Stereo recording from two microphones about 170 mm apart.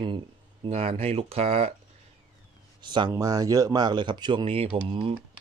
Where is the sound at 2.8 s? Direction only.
25° right (ahead or behind).